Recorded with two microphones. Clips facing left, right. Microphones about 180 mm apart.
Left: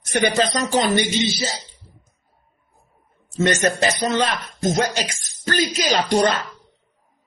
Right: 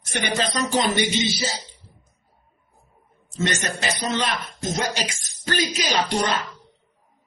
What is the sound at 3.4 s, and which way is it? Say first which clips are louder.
Speech: left 7 dB; 50° left (ahead or behind).